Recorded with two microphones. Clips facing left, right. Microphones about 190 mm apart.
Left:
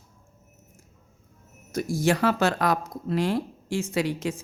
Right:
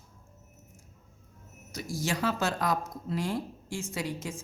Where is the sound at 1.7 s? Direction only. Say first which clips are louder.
Left 9 dB; 50° left (ahead or behind); by 4.3 s 70° left (ahead or behind).